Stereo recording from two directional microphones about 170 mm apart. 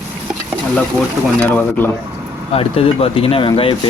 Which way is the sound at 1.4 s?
10° left (ahead or behind).